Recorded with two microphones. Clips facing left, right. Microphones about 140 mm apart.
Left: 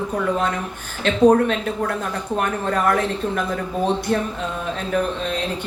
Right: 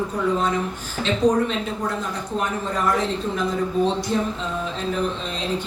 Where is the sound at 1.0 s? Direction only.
60° left (ahead or behind).